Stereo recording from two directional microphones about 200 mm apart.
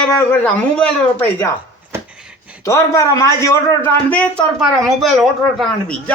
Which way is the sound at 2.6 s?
15° left (ahead or behind).